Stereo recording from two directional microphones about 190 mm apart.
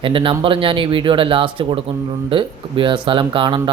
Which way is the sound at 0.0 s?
25° right (ahead or behind).